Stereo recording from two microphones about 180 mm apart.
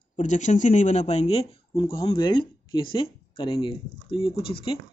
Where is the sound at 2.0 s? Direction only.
25° left (ahead or behind).